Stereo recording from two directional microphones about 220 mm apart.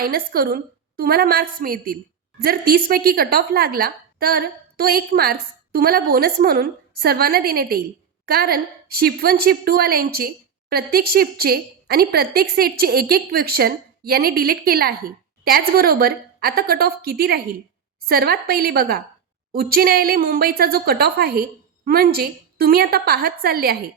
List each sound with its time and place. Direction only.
0.0 s a woman's voice: 40° right (ahead or behind)